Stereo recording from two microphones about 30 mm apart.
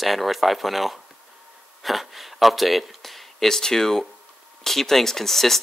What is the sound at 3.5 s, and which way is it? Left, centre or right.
Speech, centre.